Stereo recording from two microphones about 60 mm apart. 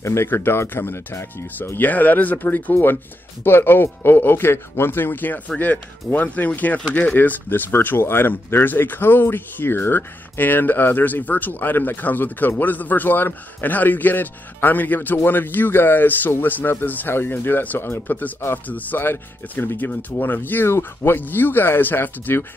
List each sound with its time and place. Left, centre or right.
0.0 s speech: left
0.3 s speech: left
1.8 s speech: left
18.7 s speech: left